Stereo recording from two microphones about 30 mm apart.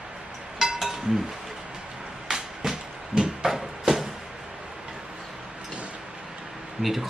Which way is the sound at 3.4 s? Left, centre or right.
Centre.